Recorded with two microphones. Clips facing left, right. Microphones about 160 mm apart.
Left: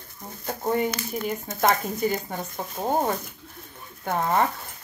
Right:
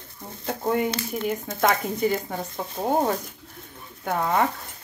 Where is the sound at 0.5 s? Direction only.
55° right (ahead or behind).